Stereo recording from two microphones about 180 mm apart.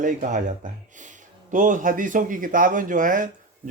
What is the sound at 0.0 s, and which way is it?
Speech, 45° right (ahead or behind).